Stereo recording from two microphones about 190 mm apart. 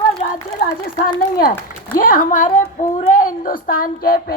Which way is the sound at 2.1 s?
45° left (ahead or behind).